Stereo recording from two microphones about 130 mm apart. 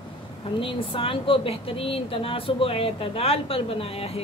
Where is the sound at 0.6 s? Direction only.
45° left (ahead or behind).